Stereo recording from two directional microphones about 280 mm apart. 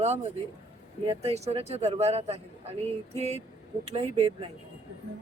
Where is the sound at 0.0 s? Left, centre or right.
Right.